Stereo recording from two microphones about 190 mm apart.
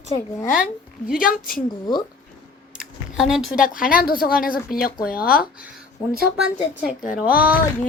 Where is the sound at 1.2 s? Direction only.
45° left (ahead or behind).